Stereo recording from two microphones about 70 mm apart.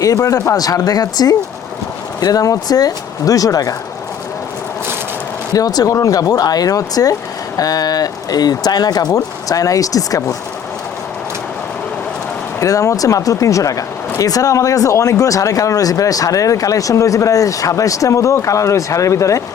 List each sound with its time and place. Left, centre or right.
0.0 s speech: left
5.5 s speech: left
12.5 s speech: left